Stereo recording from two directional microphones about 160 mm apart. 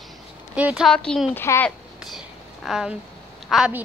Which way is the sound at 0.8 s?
5° left (ahead or behind).